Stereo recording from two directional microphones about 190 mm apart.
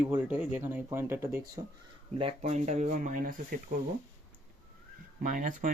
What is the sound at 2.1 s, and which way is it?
Speech, 35° right (ahead or behind).